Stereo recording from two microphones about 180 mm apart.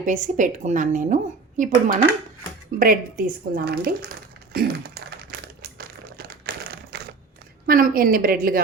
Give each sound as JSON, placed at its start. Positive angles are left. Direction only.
{"t": 0.0, "sound": "a woman's voice", "side_deg": -45}
{"t": 5.7, "sound": "crumpling", "side_deg": -55}
{"t": 7.7, "sound": "a woman's voice", "side_deg": -50}